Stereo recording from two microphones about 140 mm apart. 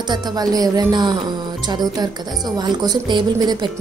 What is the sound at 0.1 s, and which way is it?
Speech, 30° right (ahead or behind).